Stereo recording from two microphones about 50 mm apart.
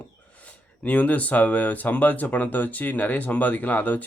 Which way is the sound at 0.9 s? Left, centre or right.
Left.